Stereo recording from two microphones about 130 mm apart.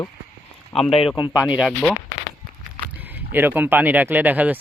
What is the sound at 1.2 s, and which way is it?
Speech, 35° left (ahead or behind).